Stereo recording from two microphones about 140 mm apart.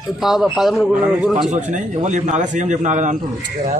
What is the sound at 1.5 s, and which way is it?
Speech, 60° right (ahead or behind).